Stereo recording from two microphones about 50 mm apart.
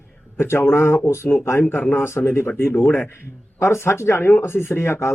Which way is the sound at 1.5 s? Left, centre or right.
Left.